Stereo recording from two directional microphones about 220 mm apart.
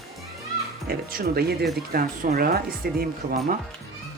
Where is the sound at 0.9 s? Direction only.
45° right (ahead or behind).